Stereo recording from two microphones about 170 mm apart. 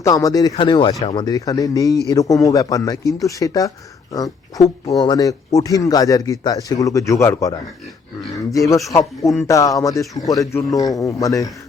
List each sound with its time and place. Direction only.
0.0 s speech: 20° left (ahead or behind)
8.9 s a man's voice: 20° left (ahead or behind)